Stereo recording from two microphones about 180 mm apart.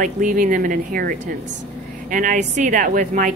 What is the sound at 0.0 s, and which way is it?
Speech, 50° right (ahead or behind).